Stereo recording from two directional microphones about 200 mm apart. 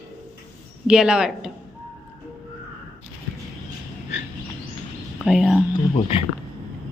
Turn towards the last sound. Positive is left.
turn(degrees=25)  # may be behind; listen again after turning